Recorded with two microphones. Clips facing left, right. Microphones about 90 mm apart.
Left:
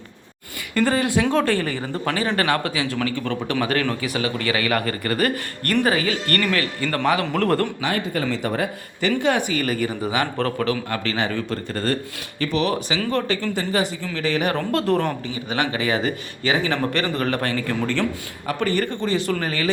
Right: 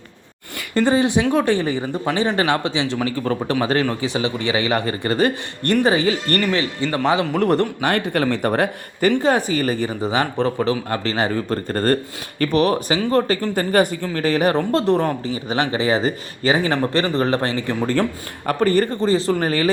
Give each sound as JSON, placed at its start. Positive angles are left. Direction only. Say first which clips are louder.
{"t": 0.7, "sound": "a man's voice", "louder": "right 3 dB", "side_deg": -25}
{"t": 7.8, "sound": "speech", "louder": "right 4 dB", "side_deg": -55}
{"t": 18.4, "sound": "speech", "louder": "right 5 dB", "side_deg": -40}